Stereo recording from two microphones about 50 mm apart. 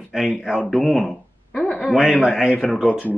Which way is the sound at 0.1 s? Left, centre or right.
Centre.